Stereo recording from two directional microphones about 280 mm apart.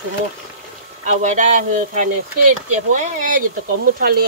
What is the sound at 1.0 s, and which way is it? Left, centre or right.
Speech, right.